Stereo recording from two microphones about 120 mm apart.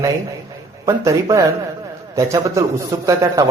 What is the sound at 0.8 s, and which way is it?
A man's voice, 30° right (ahead or behind).